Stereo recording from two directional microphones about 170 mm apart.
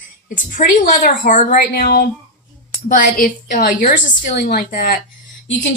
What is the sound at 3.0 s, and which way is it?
A woman's voice, 55° left (ahead or behind).